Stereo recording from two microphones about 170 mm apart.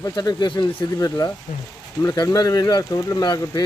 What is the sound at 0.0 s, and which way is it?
Speech, 25° left (ahead or behind).